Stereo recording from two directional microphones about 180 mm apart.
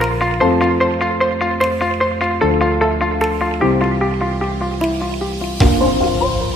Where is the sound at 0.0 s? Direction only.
Centre (ahead or behind).